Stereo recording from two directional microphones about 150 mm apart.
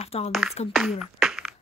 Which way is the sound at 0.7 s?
Centre (ahead or behind).